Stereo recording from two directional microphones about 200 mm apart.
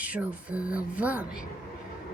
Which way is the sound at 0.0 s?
5° right (ahead or behind).